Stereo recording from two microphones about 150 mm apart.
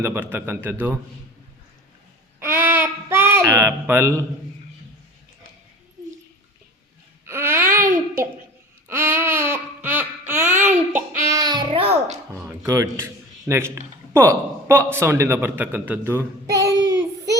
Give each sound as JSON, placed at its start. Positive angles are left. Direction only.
{"t": 0.0, "sound": "speech", "side_deg": -15}
{"t": 2.4, "sound": "a sound", "side_deg": -15}
{"t": 7.3, "sound": "babbling", "side_deg": -15}
{"t": 8.9, "sound": "babbling", "side_deg": -15}
{"t": 10.7, "sound": "a sound", "side_deg": -15}
{"t": 12.6, "sound": "a man's voice", "side_deg": -20}
{"t": 16.5, "sound": "child singing", "side_deg": -25}